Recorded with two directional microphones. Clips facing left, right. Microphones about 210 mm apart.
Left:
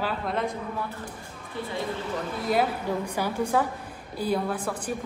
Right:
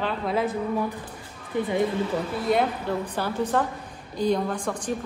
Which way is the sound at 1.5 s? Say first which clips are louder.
Right 8 dB; 15° right (ahead or behind).